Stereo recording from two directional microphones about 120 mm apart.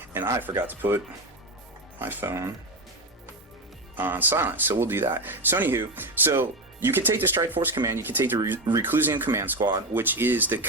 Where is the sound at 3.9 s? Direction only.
15° right (ahead or behind).